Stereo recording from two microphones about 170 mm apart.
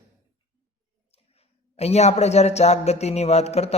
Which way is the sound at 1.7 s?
40° left (ahead or behind).